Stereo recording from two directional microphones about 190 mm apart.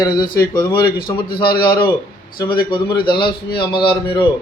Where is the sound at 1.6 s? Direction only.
25° left (ahead or behind).